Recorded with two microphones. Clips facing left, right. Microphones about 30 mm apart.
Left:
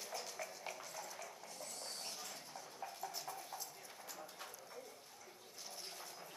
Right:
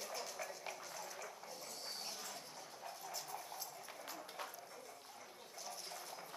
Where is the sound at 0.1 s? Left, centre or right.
Centre.